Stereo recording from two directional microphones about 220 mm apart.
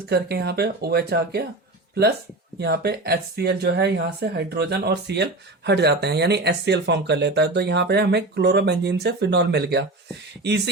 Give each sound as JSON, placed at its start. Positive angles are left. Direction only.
{"t": 0.1, "sound": "speech", "side_deg": -45}
{"t": 2.6, "sound": "speech", "side_deg": -45}